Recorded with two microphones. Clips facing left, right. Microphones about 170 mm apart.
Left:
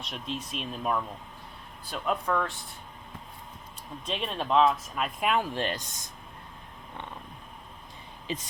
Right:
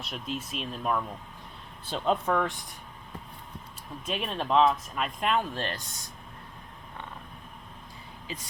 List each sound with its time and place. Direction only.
0.0 s speech: 5° right (ahead or behind)
1.9 s speech: 25° right (ahead or behind)
4.0 s speech: 5° right (ahead or behind); by 6.0 s 20° left (ahead or behind)